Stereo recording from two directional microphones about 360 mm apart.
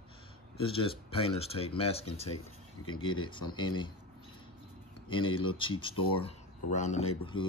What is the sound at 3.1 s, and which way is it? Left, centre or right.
Speech, centre.